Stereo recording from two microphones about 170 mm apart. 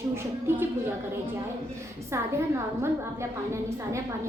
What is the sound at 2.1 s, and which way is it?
A woman's voice, 15° right (ahead or behind).